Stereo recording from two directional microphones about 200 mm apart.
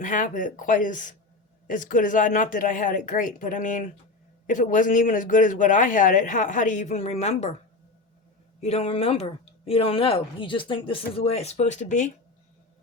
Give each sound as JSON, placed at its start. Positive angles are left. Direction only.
{"t": 0.0, "sound": "a man's voice", "side_deg": 40}
{"t": 8.6, "sound": "a woman's voice", "side_deg": 30}